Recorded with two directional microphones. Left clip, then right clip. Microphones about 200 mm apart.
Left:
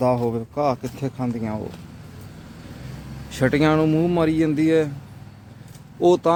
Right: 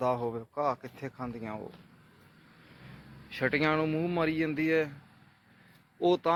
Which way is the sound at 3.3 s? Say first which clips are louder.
Left 9 dB; 15° left (ahead or behind).